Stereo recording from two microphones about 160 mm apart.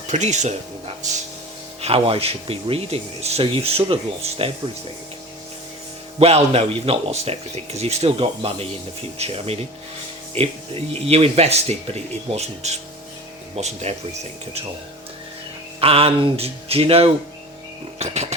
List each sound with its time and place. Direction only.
0.1 s speech: 45° right (ahead or behind)
1.8 s speech: 35° right (ahead or behind)
6.1 s speech: 40° right (ahead or behind)
15.8 s speech: 35° right (ahead or behind)